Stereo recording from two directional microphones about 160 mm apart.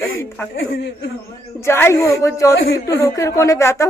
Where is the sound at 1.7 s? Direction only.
15° left (ahead or behind).